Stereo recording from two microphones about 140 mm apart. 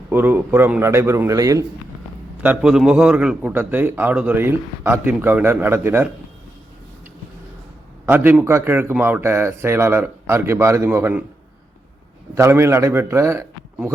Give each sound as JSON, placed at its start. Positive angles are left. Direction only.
{"t": 0.1, "sound": "a man's voice", "side_deg": -15}
{"t": 2.4, "sound": "a man's voice", "side_deg": -5}
{"t": 8.0, "sound": "a man's voice", "side_deg": -15}
{"t": 12.3, "sound": "a man's voice", "side_deg": -20}